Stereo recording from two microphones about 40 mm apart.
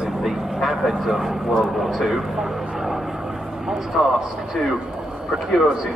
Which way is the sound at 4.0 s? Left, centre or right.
Right.